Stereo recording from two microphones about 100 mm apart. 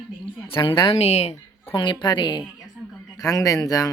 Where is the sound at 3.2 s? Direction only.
35° left (ahead or behind).